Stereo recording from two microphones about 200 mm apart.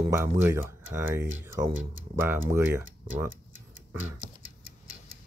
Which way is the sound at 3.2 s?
75° right (ahead or behind).